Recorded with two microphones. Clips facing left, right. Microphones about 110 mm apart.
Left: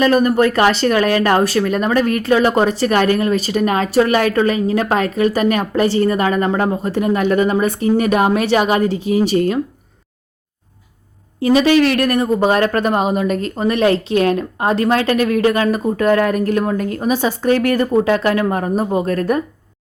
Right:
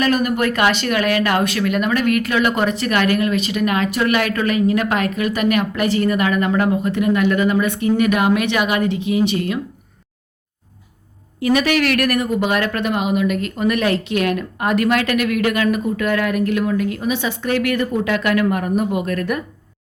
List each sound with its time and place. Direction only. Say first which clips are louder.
0.0 s speech: left 5 dB; 30° left (ahead or behind)
11.3 s speech: left 5 dB; 30° left (ahead or behind)